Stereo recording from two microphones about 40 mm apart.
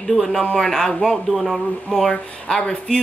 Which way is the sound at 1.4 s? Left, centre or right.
Centre.